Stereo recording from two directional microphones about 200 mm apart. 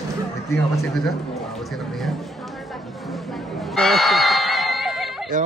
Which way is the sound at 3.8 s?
Centre (ahead or behind).